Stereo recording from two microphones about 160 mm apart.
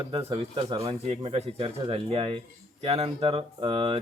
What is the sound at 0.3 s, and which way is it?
A man's voice, 35° right (ahead or behind).